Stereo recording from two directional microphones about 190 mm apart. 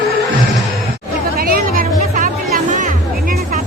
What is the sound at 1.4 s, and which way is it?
Music, 50° right (ahead or behind).